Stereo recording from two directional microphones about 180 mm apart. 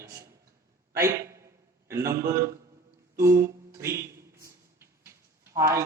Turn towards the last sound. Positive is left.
turn(degrees=-15)  # may be behind; listen again after turning